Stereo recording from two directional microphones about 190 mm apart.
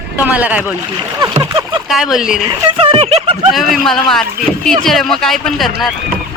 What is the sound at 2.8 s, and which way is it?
Speech, 30° right (ahead or behind).